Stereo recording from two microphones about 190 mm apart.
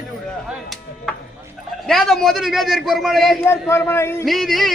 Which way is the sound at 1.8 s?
Centre (ahead or behind).